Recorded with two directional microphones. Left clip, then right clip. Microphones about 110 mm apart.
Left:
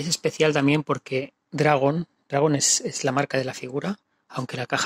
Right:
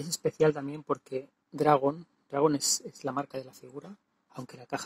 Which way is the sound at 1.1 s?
15° left (ahead or behind).